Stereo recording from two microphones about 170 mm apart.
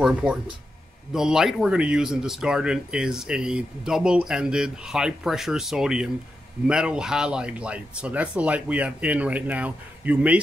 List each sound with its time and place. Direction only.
0.0 s speech: 5° right (ahead or behind)